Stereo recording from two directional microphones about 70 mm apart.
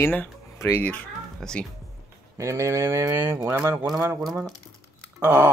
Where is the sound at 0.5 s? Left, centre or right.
Left.